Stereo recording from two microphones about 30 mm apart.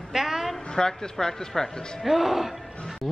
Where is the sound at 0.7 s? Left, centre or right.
Left.